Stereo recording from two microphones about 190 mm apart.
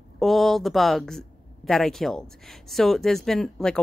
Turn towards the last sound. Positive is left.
turn(degrees=5)  # may be behind; listen again after turning